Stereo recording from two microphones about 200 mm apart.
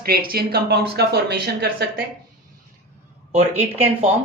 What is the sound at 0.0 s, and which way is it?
Speech, 45° right (ahead or behind).